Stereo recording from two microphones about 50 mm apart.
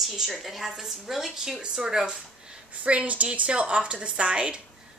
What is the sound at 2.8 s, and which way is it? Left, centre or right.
A woman's voice, right.